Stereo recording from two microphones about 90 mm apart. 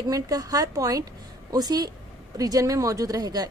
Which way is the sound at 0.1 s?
40° right (ahead or behind).